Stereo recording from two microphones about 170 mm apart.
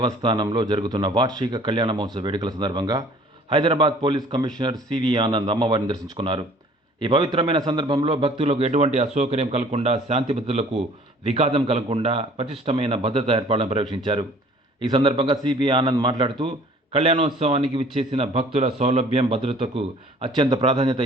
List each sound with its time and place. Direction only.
0.0 s a man's voice: 25° right (ahead or behind)